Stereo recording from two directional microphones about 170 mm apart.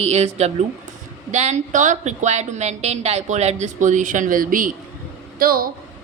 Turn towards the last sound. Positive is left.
turn(degrees=-60)  # may be behind; listen again after turning